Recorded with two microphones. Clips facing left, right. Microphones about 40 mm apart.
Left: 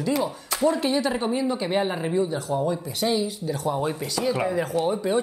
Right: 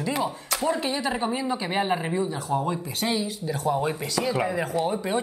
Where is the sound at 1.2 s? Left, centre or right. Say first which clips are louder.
Left 2 dB; centre.